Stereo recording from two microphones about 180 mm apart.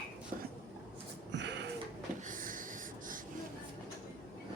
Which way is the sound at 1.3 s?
80° right.